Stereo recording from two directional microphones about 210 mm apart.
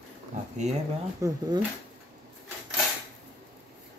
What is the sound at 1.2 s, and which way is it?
Speech, 15° right (ahead or behind).